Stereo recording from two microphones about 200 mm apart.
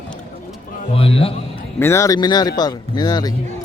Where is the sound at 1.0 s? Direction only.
30° left (ahead or behind).